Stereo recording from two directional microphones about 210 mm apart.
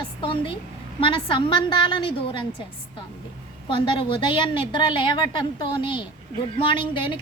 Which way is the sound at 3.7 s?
25° left (ahead or behind).